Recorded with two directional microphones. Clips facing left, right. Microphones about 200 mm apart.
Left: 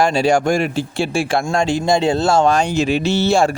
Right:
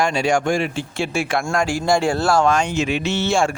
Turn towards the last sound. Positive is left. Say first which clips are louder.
# left 4 dB
turn(degrees=35)  # may be behind; listen again after turning